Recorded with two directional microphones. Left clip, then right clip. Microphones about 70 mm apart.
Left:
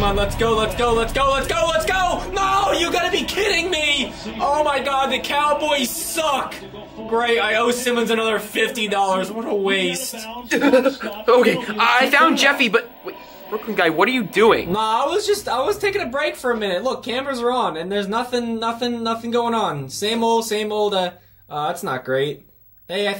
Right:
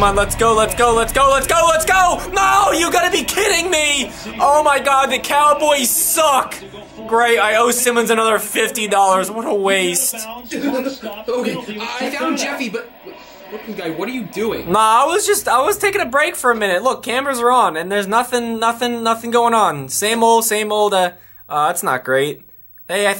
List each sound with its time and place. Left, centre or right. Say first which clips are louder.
0.0 s speech: right 6 dB; right
10.5 s a man's voice: left 6 dB; left
14.7 s speech: right 7 dB; right